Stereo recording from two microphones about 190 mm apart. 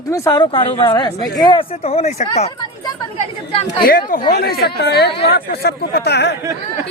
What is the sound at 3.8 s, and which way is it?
A woman's voice, 50° left (ahead or behind).